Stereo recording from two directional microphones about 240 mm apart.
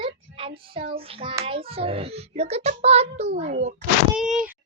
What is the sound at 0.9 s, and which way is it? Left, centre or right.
A child's voice, right.